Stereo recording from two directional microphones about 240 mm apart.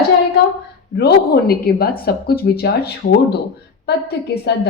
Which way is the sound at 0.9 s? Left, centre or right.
Left.